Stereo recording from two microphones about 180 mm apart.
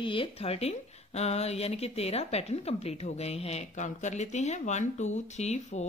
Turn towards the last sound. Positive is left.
turn(degrees=40)  # may be behind; listen again after turning